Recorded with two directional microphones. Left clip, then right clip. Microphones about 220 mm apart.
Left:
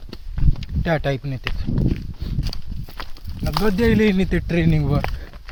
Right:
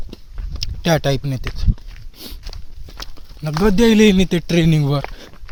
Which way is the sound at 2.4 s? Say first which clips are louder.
Left 5 dB; 50° left (ahead or behind).